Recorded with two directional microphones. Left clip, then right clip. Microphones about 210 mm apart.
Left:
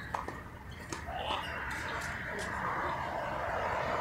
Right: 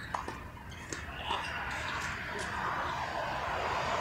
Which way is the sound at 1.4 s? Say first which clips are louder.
Right 1 dB; 50° right (ahead or behind).